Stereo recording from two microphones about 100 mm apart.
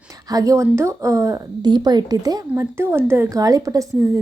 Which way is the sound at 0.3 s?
35° right (ahead or behind).